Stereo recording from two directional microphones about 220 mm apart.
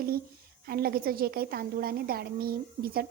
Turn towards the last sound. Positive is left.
turn(degrees=-45)  # may be behind; listen again after turning